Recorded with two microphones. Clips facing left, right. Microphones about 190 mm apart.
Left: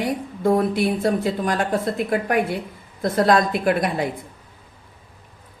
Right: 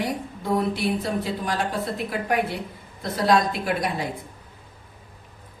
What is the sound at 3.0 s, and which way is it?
Speech, 50° left (ahead or behind).